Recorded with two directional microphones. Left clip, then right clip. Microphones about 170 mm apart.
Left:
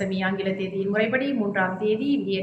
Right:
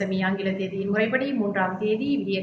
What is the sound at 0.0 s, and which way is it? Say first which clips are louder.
A woman's voice: even; 15° left (ahead or behind).